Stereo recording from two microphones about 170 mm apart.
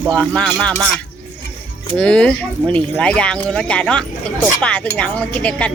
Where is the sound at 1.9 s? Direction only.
5° left (ahead or behind).